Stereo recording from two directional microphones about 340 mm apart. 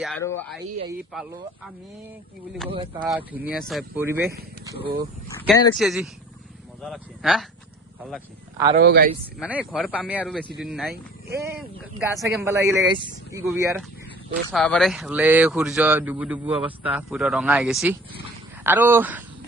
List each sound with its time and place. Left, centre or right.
0.0 s speech: centre
3.0 s speech: centre
8.7 s speech: right
9.4 s speech: centre